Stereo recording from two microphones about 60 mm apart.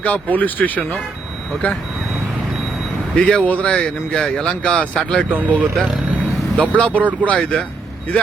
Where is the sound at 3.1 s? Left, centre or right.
Centre.